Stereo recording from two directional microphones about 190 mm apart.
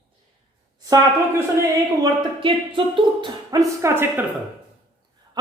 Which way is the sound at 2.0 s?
25° right (ahead or behind).